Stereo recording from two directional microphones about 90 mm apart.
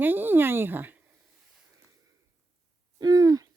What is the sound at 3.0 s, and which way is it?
Owl, 45° right (ahead or behind).